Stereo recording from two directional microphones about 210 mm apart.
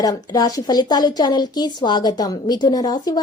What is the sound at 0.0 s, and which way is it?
A woman's voice, 20° left (ahead or behind).